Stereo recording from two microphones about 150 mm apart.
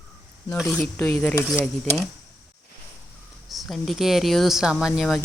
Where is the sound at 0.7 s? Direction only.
5° left (ahead or behind).